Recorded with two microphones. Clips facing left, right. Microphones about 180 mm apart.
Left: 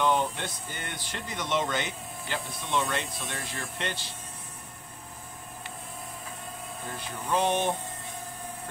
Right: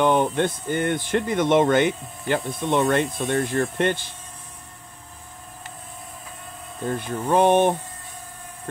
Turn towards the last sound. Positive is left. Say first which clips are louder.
# right 9 dB
turn(degrees=-55)  # may be behind; listen again after turning